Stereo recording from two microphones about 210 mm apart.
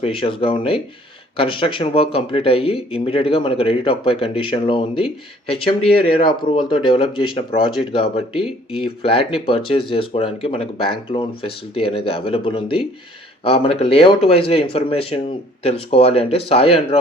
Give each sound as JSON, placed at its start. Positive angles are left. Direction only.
{"t": 0.0, "sound": "speech", "side_deg": 25}